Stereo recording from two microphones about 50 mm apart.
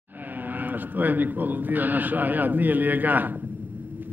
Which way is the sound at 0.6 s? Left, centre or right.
Right.